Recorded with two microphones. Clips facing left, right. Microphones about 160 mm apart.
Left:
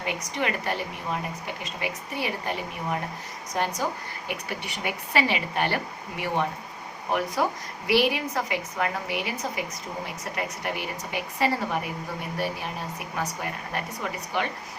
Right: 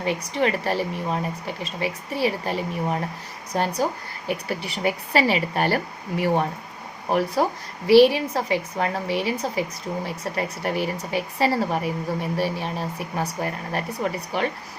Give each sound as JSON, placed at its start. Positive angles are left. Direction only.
{"t": 0.0, "sound": "speech", "side_deg": -30}